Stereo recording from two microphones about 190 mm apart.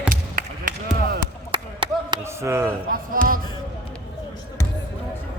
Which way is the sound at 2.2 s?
15° right (ahead or behind).